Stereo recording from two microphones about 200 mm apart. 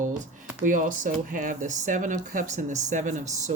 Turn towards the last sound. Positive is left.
turn(degrees=-35)  # may be behind; listen again after turning